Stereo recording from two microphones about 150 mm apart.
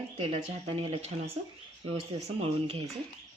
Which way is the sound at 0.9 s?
45° right (ahead or behind).